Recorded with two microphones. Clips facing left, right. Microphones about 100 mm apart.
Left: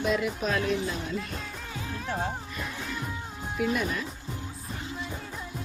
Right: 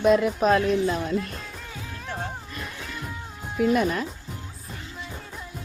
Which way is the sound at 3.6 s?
45° right (ahead or behind).